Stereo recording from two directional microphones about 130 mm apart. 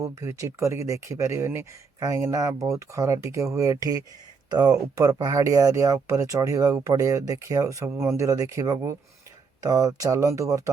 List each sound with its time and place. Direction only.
0.0 s speech: 20° right (ahead or behind)